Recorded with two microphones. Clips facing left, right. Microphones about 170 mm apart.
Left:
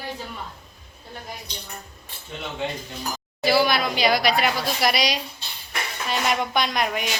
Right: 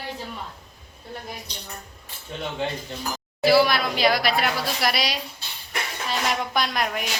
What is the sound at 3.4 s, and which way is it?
A woman's voice, centre (ahead or behind).